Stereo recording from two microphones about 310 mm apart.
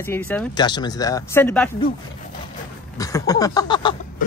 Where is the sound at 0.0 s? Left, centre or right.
Centre.